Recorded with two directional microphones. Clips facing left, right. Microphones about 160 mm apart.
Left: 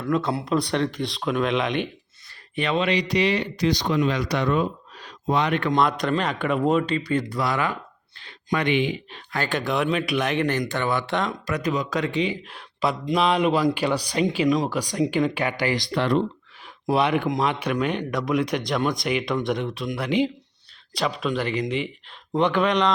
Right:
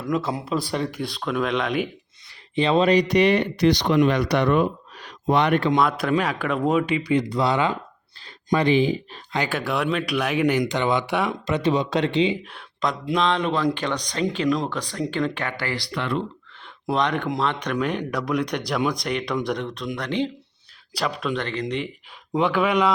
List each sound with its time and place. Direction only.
0.0 s speech: 5° right (ahead or behind)
2.6 s speech: 25° right (ahead or behind)
2.8 s speech: 45° right (ahead or behind); by 5.5 s 65° right (ahead or behind)
5.7 s speech: centre (ahead or behind)
6.8 s speech: 10° right (ahead or behind); by 9.0 s 35° right (ahead or behind)
9.5 s speech: 5° right (ahead or behind)
11.3 s speech: 25° right (ahead or behind)
12.5 s speech: 5° left (ahead or behind)
15.9 s speech: 35° left (ahead or behind)
16.9 s speech: 10° left (ahead or behind); by 22.9 s 5° right (ahead or behind)